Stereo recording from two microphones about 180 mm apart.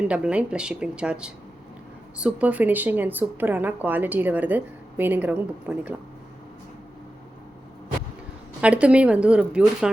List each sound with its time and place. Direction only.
0.1 s a woman's voice: 5° right (ahead or behind)
8.6 s a woman's voice: 5° right (ahead or behind)